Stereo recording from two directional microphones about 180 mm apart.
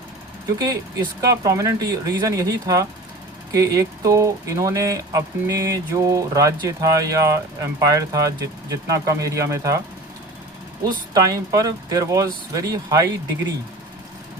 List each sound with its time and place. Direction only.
0.6 s speech: 20° right (ahead or behind)
10.8 s speech: 20° right (ahead or behind)